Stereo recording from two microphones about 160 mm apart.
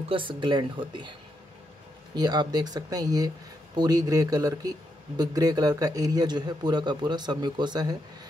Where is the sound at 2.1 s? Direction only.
25° right (ahead or behind).